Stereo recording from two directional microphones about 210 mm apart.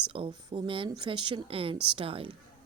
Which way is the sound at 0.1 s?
25° right (ahead or behind).